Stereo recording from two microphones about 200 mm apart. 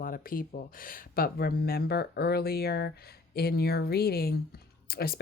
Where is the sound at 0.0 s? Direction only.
45° left (ahead or behind).